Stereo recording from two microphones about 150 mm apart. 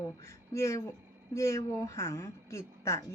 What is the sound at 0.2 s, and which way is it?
A woman's voice, 20° left (ahead or behind).